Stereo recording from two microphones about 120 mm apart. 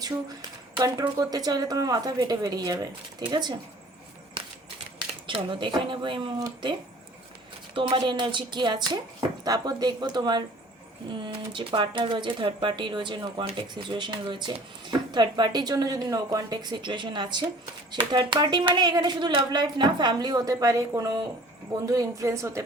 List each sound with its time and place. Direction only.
0.8 s speech: 30° right (ahead or behind)
4.9 s speech: 45° right (ahead or behind)
7.8 s a woman's voice: 45° right (ahead or behind); by 22.6 s 25° right (ahead or behind)